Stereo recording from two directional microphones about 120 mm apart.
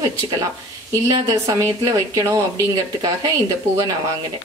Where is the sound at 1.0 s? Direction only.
30° right (ahead or behind).